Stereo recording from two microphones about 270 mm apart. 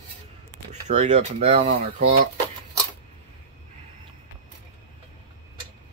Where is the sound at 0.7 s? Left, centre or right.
Right.